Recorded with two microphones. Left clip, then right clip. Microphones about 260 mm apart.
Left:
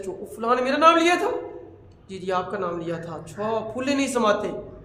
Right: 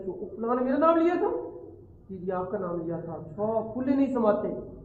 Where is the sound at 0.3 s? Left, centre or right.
Left.